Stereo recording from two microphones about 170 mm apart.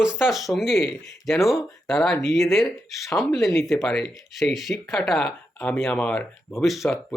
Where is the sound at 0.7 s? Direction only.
10° left (ahead or behind).